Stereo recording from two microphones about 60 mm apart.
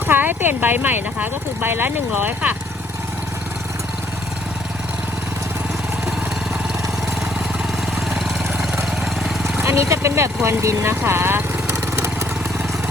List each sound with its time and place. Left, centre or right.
0.1 s speech: right
9.6 s speech: right
11.0 s vehicle: right